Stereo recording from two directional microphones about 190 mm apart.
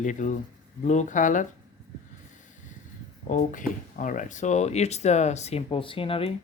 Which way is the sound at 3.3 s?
45° left (ahead or behind).